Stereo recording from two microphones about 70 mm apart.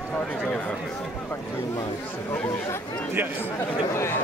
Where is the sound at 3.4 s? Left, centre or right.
Left.